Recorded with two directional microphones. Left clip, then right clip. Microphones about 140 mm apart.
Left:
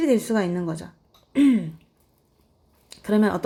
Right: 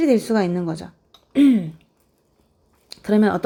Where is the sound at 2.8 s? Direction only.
20° right (ahead or behind).